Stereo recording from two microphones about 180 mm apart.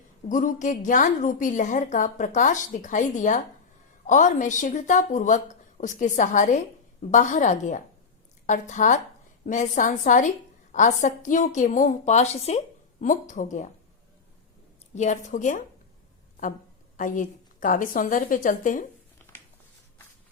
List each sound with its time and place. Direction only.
0.3 s a woman's voice: 45° left (ahead or behind)
14.9 s a woman's voice: 40° left (ahead or behind)
17.0 s a woman's voice: 45° left (ahead or behind)
19.2 s a sound: 10° left (ahead or behind)